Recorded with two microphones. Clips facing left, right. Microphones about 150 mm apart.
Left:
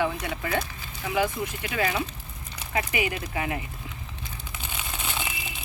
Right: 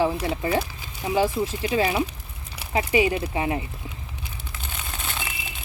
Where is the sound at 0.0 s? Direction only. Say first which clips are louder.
Right 5 dB; 30° right (ahead or behind).